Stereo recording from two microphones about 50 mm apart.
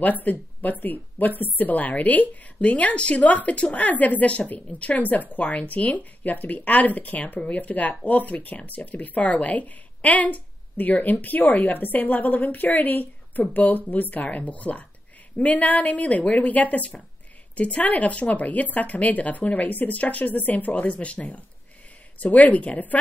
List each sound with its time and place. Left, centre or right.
0.0 s a woman's voice: left